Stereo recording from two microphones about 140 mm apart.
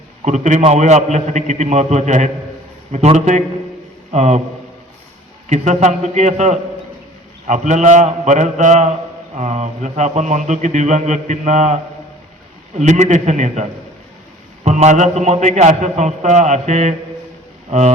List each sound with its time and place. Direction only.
0.3 s a man's voice: 60° right (ahead or behind)
5.5 s speech: 55° right (ahead or behind)